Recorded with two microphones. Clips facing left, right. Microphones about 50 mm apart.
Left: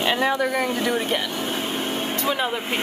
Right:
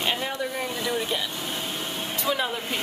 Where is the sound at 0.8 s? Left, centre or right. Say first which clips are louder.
Left 4 dB; left.